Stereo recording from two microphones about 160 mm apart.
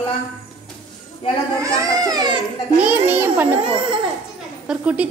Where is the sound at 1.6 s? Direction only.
20° right (ahead or behind).